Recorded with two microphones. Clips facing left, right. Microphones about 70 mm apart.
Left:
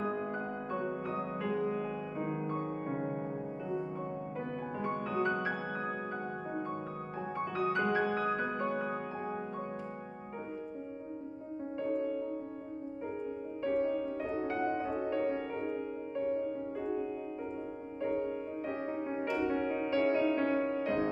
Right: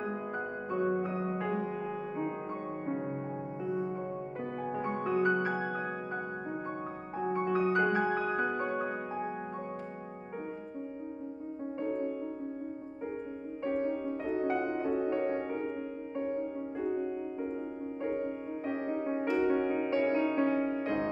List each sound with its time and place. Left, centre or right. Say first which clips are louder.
0.7 s music: right 8 dB; centre
4.7 s music: right 3 dB; centre
7.2 s music: right 6 dB; centre
14.5 s music: right 2 dB; centre
18.0 s music: left 1 dB; centre